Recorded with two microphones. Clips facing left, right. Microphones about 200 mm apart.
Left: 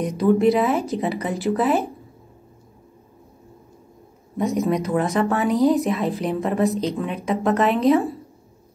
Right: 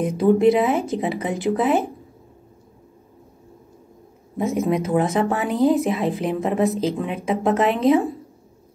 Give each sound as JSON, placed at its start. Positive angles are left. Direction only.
{"t": 0.4, "sound": "a woman's voice", "side_deg": 0}
{"t": 4.4, "sound": "a woman's voice", "side_deg": 0}